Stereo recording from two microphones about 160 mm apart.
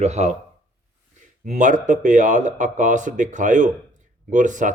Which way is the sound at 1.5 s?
50° right (ahead or behind).